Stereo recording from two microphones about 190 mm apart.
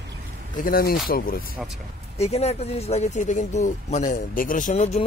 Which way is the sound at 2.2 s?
35° left (ahead or behind).